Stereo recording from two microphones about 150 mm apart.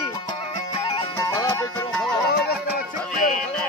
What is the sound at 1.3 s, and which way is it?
Music, 20° left (ahead or behind).